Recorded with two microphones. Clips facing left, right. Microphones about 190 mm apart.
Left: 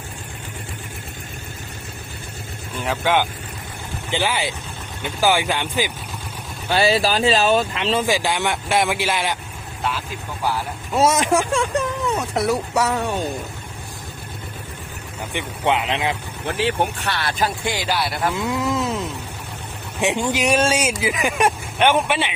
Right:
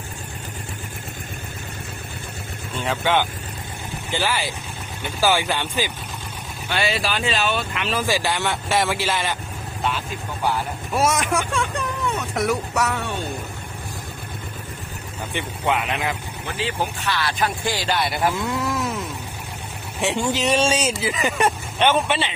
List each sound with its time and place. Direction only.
2.7 s speech: 5° left (ahead or behind)
6.7 s speech: 35° left (ahead or behind); by 9.4 s 15° left (ahead or behind)
10.9 s speech: 25° left (ahead or behind)
15.3 s speech: 20° left (ahead or behind)
16.5 s speech: 65° left (ahead or behind)
17.4 s speech: 25° left (ahead or behind)
17.8 s speech: 5° left (ahead or behind)
18.3 s speech: 20° left (ahead or behind)
20.0 s speech: 15° left (ahead or behind)